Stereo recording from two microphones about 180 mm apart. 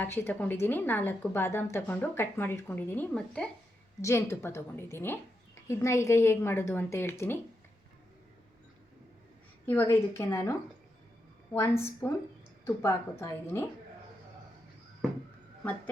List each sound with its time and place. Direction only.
0.0 s a woman's voice: 10° left (ahead or behind)
9.6 s a woman's voice: 10° left (ahead or behind)